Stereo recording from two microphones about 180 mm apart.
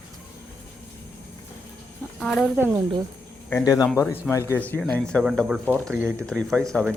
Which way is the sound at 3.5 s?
20° left (ahead or behind).